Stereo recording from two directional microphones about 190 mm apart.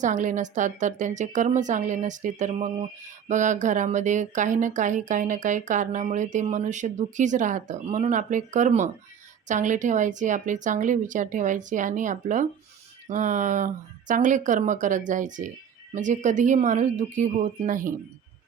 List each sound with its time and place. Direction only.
0.0 s speech: 40° right (ahead or behind)